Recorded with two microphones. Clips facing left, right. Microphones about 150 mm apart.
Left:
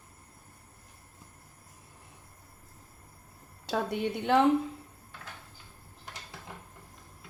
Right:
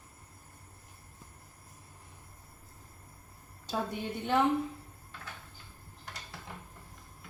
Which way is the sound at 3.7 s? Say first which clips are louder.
Left 4 dB; 80° left.